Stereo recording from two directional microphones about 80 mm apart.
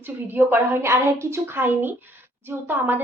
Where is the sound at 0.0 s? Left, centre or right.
Right.